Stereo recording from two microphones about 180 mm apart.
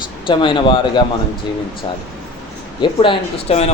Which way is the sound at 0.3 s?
25° left (ahead or behind).